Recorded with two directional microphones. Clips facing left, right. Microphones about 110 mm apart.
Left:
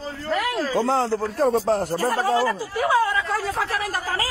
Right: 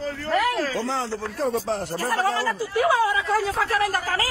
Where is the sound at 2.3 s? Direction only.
20° left (ahead or behind).